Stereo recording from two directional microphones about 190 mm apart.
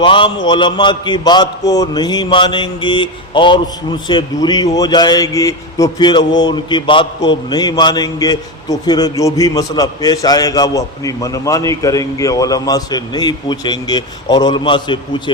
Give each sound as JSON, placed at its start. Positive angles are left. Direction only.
{"t": 0.0, "sound": "speech", "side_deg": 25}